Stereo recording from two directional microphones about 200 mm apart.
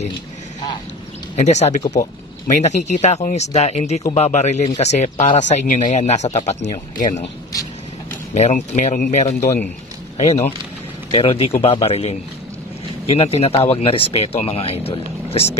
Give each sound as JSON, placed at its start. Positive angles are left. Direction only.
{"t": 1.3, "sound": "speech", "side_deg": 35}
{"t": 8.4, "sound": "speech", "side_deg": 35}
{"t": 9.4, "sound": "speech", "side_deg": 15}
{"t": 10.1, "sound": "speech", "side_deg": 35}